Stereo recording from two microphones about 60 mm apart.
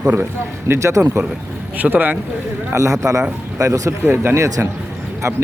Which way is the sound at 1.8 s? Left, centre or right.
Right.